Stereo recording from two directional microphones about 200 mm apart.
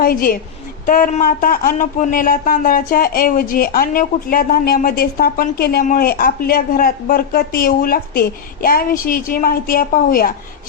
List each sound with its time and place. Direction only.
0.0 s a woman's voice: 45° left (ahead or behind)